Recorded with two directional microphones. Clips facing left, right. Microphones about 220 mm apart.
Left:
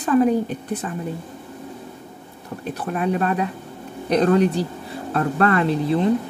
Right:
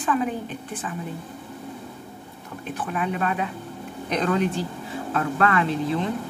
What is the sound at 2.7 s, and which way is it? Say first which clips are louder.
A woman's voice: left 5 dB; 40° left (ahead or behind).